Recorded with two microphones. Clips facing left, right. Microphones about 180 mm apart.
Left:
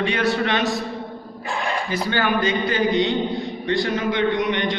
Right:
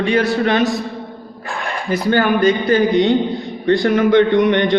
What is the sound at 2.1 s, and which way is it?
A man's voice, 45° right (ahead or behind).